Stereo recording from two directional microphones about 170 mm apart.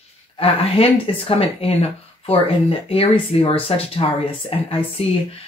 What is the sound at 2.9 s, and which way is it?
Speech, 35° left (ahead or behind).